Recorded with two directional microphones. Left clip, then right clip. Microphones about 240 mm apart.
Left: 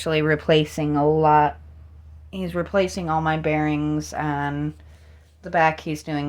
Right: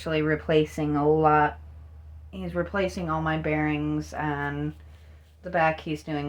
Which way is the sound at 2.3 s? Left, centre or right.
Left.